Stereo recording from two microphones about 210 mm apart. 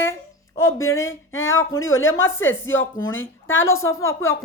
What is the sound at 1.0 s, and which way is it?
A woman's voice, 70° left (ahead or behind).